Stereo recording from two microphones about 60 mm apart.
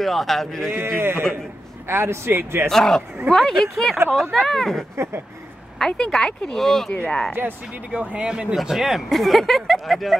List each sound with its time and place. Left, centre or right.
0.0 s speech: centre
0.7 s a man's voice: right
2.7 s speech: centre
4.9 s a man's voice: right
5.8 s speech: centre
6.9 s speech: centre
7.3 s speech: right
7.9 s speech: right
8.5 s speech: centre